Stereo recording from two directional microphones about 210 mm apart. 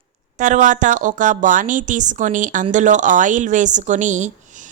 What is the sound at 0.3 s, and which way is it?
A woman's voice, 35° right (ahead or behind).